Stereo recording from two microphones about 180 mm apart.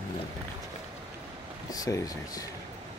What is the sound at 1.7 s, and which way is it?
Speech, 20° left (ahead or behind).